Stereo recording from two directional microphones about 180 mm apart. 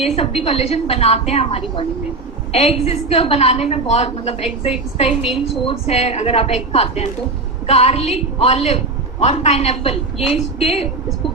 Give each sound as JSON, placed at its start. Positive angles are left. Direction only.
{"t": 0.0, "sound": "a woman's voice", "side_deg": 35}